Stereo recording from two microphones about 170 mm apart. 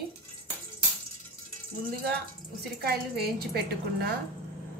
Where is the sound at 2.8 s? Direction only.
65° right (ahead or behind).